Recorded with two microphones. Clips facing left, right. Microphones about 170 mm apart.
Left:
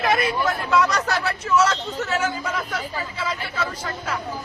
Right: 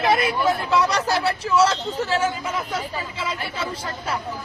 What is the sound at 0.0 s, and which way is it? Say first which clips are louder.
Speech: right 2 dB; 25° right (ahead or behind).